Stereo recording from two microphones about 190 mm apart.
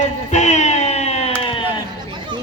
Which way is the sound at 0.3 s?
35° left (ahead or behind).